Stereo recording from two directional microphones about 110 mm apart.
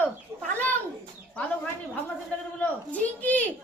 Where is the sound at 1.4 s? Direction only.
15° left (ahead or behind).